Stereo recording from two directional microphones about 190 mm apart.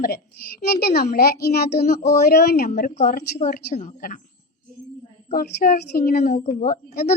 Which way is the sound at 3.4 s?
45° left (ahead or behind).